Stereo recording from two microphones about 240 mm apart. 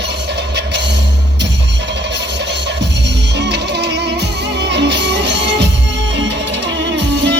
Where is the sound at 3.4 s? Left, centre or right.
Right.